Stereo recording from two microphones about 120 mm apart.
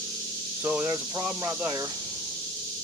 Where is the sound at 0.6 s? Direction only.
20° right (ahead or behind).